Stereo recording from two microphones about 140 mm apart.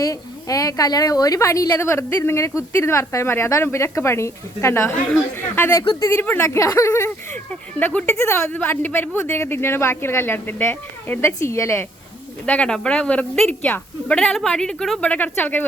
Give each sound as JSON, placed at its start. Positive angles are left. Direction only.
{"t": 0.0, "sound": "a woman's voice", "side_deg": 25}
{"t": 12.5, "sound": "a woman's voice", "side_deg": 5}